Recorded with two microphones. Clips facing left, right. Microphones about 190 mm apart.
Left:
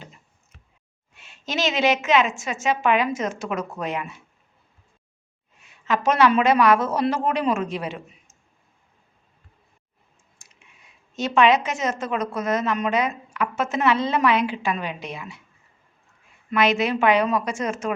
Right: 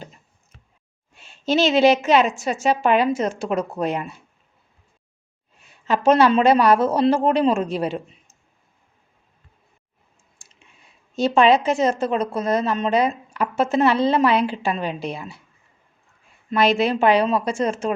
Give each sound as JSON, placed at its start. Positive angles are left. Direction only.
{"t": 1.1, "sound": "a woman's voice", "side_deg": -30}
{"t": 5.6, "sound": "a woman's voice", "side_deg": -35}
{"t": 10.4, "sound": "clicking", "side_deg": -30}
{"t": 11.1, "sound": "a woman's voice", "side_deg": -35}
{"t": 16.5, "sound": "a woman's voice", "side_deg": -30}